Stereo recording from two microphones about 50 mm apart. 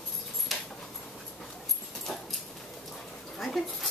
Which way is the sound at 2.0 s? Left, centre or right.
Centre.